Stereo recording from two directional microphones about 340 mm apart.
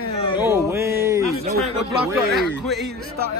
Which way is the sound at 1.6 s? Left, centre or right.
Centre.